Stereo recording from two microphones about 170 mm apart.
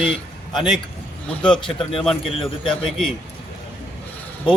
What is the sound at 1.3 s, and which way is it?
Speech, 5° left (ahead or behind).